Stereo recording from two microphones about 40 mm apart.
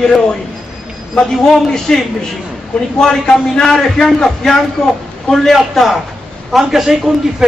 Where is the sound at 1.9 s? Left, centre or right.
Centre.